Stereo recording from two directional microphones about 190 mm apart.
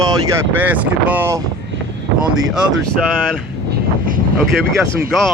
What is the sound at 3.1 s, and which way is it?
Speech, 5° left (ahead or behind).